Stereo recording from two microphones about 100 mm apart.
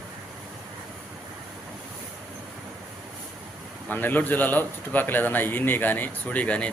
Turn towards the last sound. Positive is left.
turn(degrees=10)  # may be behind; listen again after turning